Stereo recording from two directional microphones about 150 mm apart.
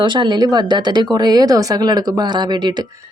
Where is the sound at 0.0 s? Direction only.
30° right (ahead or behind).